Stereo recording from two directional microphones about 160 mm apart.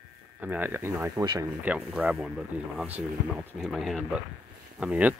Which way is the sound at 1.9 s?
5° right (ahead or behind).